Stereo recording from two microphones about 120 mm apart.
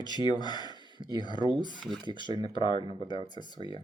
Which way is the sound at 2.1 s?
45° left (ahead or behind).